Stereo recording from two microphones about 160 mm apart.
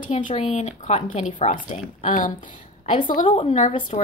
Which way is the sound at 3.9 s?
40° left (ahead or behind).